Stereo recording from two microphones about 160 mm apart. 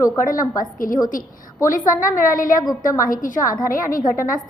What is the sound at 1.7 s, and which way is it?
A woman's voice, 55° left (ahead or behind).